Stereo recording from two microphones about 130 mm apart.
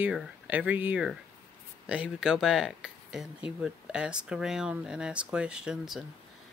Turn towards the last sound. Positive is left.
turn(degrees=-5)  # may be behind; listen again after turning